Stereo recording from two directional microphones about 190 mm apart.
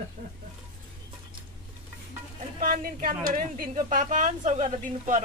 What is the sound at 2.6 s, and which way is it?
A woman's voice, 50° right (ahead or behind).